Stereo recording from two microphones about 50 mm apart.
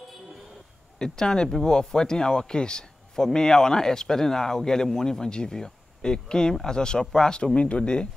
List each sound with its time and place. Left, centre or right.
0.9 s speech: centre